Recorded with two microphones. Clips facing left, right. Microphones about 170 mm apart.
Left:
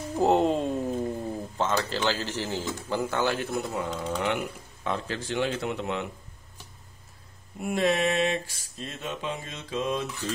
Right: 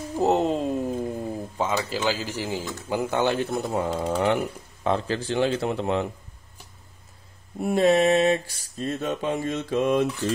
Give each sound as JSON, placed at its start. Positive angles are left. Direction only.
{"t": 0.1, "sound": "a sound", "side_deg": 0}
{"t": 2.9, "sound": "speech", "side_deg": -15}
{"t": 3.7, "sound": "speech", "side_deg": -35}
{"t": 7.5, "sound": "mantra", "side_deg": -35}